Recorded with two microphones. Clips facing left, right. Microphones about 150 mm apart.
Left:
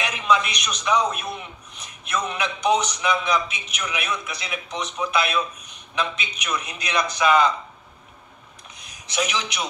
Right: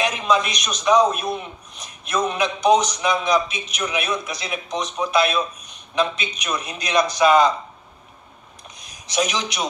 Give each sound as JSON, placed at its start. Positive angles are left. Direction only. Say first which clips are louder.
{"t": 0.0, "sound": "a man's voice", "louder": "right 2 dB", "side_deg": -35}
{"t": 9.1, "sound": "a man's voice", "louder": "right 3 dB", "side_deg": -35}